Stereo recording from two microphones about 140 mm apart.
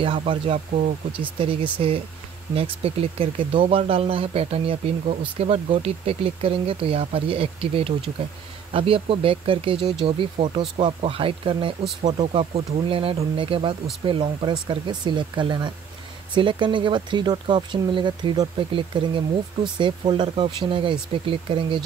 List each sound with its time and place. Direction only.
0.0 s speech: 40° right (ahead or behind)
12.0 s speech: 60° right (ahead or behind)
12.3 s speech: 45° right (ahead or behind)